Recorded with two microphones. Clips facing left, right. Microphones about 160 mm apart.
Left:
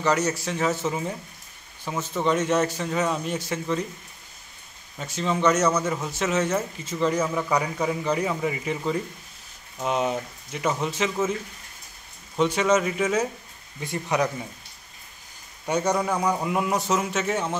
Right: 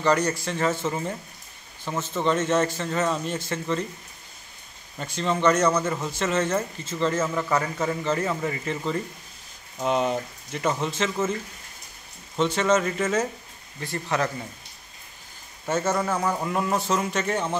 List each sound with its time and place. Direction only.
0.0 s a man's voice: 5° left (ahead or behind)
4.9 s a man's voice: 5° left (ahead or behind)
12.4 s a man's voice: 10° left (ahead or behind)
15.7 s a man's voice: 15° left (ahead or behind)